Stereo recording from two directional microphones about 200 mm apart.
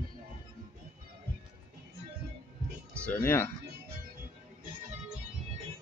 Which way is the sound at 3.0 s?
10° left (ahead or behind).